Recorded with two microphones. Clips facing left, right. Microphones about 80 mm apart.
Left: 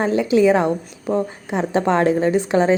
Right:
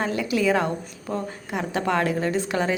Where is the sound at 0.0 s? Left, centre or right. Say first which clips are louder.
Left 8 dB; left.